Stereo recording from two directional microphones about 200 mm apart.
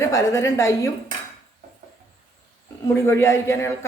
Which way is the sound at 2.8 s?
15° left (ahead or behind).